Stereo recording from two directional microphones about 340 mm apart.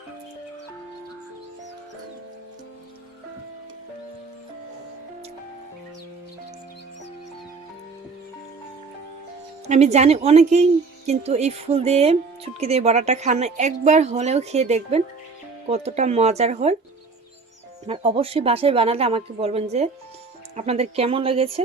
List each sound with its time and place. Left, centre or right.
9.6 s a woman's voice: centre
17.8 s a woman's voice: centre